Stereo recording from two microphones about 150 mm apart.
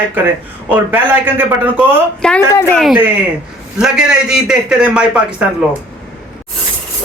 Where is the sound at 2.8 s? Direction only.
5° right (ahead or behind).